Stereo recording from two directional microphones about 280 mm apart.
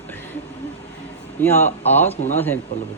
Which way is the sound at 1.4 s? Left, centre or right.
Centre.